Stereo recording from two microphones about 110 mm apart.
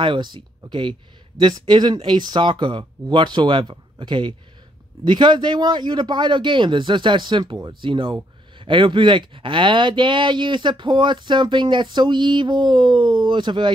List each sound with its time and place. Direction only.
0.0 s a man's voice: 45° right (ahead or behind)